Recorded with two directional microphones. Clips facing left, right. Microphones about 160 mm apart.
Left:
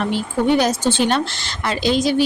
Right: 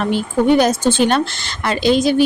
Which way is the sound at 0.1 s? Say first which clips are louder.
Right 5 dB; 50° right (ahead or behind).